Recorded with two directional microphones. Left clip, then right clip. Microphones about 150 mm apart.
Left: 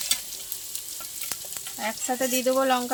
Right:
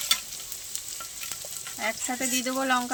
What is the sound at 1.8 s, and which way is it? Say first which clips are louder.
Speech: left 2 dB; 50° left (ahead or behind).